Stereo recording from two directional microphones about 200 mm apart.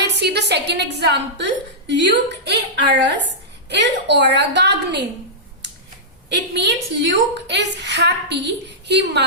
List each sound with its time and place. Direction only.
0.0 s a woman's voice: 55° right (ahead or behind)
6.2 s a woman's voice: 55° right (ahead or behind)